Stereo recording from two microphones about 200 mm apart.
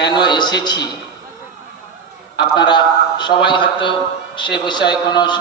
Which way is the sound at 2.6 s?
25° left (ahead or behind).